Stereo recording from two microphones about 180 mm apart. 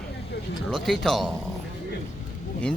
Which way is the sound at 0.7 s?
Centre (ahead or behind).